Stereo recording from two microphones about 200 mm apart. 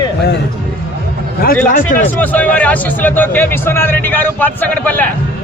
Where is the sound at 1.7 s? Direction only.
45° left (ahead or behind).